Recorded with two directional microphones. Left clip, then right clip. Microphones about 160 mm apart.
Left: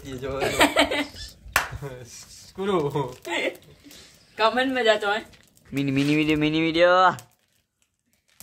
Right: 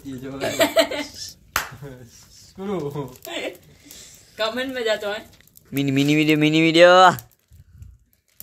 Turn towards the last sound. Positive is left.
turn(degrees=-30)  # may be behind; listen again after turning